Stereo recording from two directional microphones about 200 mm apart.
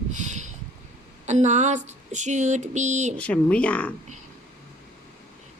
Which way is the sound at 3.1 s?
5° left (ahead or behind).